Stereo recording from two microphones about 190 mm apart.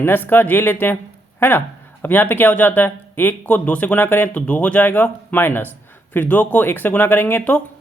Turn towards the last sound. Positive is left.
turn(degrees=10)  # may be behind; listen again after turning